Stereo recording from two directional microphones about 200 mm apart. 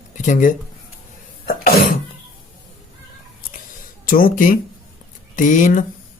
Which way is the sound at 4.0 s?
45° left (ahead or behind).